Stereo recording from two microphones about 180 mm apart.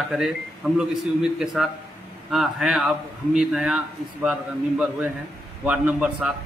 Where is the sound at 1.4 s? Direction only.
Centre (ahead or behind).